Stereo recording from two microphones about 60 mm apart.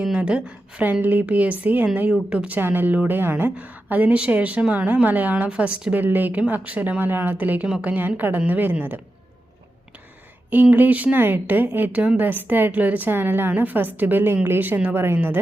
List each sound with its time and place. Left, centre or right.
0.0 s a woman's voice: centre
2.6 s a woman's voice: right; by 5.8 s centre
5.9 s a woman's voice: right
10.5 s a woman's voice: right
11.9 s a woman's voice: right